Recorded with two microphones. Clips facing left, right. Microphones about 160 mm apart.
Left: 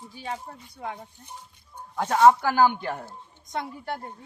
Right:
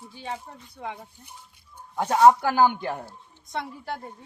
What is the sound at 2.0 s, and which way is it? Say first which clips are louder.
Speech: right 1 dB; 15° right (ahead or behind).